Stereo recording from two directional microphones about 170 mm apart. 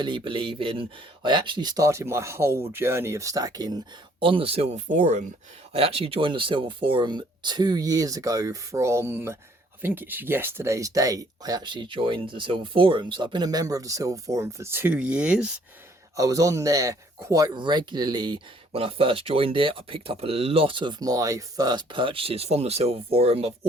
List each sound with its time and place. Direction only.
0.0 s speech: 30° right (ahead or behind); by 5.3 s 45° right (ahead or behind)
5.7 s speech: 35° right (ahead or behind); by 15.5 s 5° right (ahead or behind)
16.1 s speech: 20° right (ahead or behind); by 23.5 s 35° right (ahead or behind)